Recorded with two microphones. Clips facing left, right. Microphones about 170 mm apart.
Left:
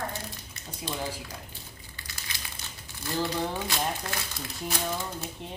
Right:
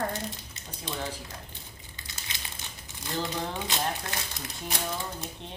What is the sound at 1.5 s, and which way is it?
Crumpling, 20° right (ahead or behind).